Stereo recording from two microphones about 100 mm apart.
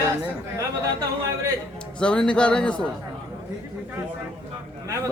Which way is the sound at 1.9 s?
10° left (ahead or behind).